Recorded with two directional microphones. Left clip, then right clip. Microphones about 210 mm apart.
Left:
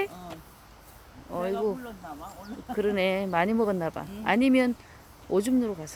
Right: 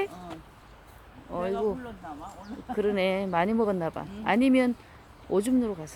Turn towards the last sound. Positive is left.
turn(degrees=0)  # may be behind; listen again after turning